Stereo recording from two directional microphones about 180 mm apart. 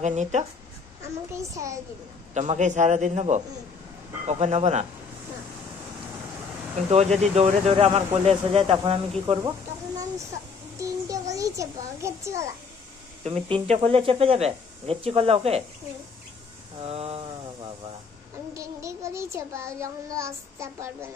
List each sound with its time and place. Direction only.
0.0 s speech: 40° right (ahead or behind)
1.3 s child singing: 15° right (ahead or behind)
2.3 s speech: 40° right (ahead or behind)
6.9 s speech: 35° right (ahead or behind); by 10.2 s 20° right (ahead or behind)
10.8 s child singing: 20° right (ahead or behind)
13.2 s speech: 35° right (ahead or behind)
16.8 s speech: 35° right (ahead or behind)
18.5 s child singing: 15° right (ahead or behind)